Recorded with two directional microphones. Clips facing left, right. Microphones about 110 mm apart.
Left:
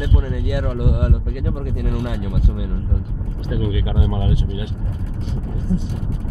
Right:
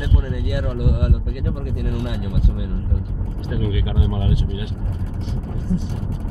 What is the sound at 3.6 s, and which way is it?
Speech, 30° left (ahead or behind).